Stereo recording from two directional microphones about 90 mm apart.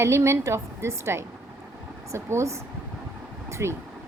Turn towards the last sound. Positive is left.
turn(degrees=-30)  # may be behind; listen again after turning